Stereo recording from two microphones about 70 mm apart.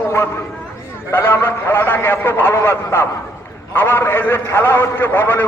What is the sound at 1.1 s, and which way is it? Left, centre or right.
A man's voice, left.